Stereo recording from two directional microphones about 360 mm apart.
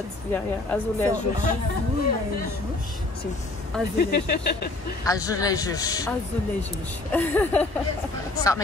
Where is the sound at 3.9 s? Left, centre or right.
Left.